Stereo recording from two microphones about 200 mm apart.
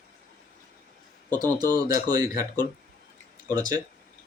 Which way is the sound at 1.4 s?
20° right (ahead or behind).